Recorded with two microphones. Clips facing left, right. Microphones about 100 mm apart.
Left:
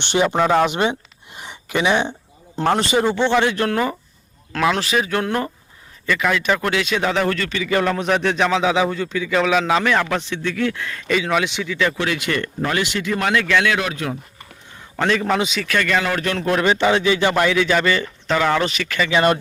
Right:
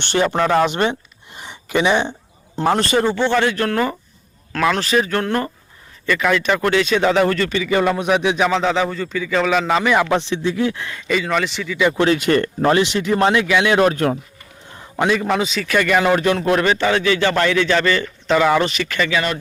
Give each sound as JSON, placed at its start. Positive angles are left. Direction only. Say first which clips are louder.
{"t": 0.0, "sound": "a man's voice", "louder": "even", "side_deg": 15}
{"t": 10.1, "sound": "speech", "louder": "right 4 dB", "side_deg": -25}
{"t": 10.9, "sound": "speech", "louder": "left 2 dB", "side_deg": 0}
{"t": 11.9, "sound": "speech", "louder": "right 7 dB", "side_deg": -40}
{"t": 13.7, "sound": "speech", "louder": "right 8 dB", "side_deg": -45}
{"t": 14.9, "sound": "a man's voice", "louder": "right 1 dB", "side_deg": -5}
{"t": 16.6, "sound": "a man's voice", "louder": "even", "side_deg": 15}
{"t": 18.3, "sound": "speech", "louder": "right 3 dB", "side_deg": -5}